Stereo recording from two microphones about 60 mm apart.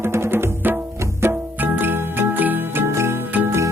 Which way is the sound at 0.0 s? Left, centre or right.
Right.